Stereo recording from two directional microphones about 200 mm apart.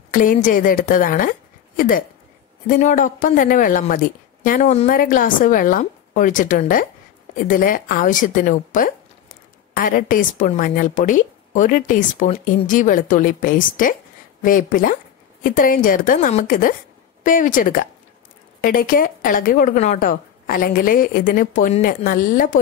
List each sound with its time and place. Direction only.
0.1 s a woman's voice: 45° left (ahead or behind)